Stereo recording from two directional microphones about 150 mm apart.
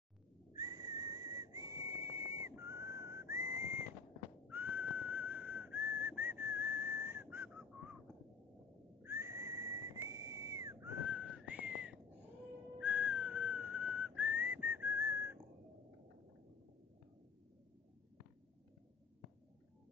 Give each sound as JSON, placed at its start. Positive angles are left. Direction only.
{"t": 0.5, "sound": "whistle", "side_deg": -25}
{"t": 4.5, "sound": "whistling", "side_deg": -10}
{"t": 9.0, "sound": "whistle", "side_deg": -15}
{"t": 12.7, "sound": "whistling", "side_deg": -10}